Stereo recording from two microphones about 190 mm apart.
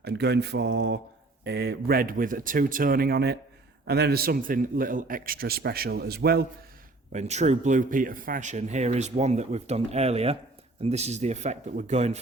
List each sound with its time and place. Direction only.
0.0 s mantra: 60° right (ahead or behind)
1.5 s a man's voice: 55° right (ahead or behind)
7.1 s speech: 35° right (ahead or behind)